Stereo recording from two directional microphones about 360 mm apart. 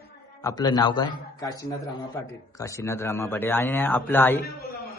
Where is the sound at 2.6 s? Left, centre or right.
Centre.